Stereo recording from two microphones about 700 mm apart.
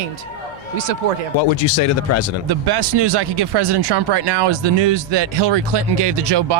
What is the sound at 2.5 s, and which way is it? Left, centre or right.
Speech, right.